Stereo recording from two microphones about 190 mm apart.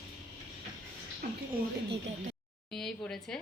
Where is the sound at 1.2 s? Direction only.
50° right (ahead or behind).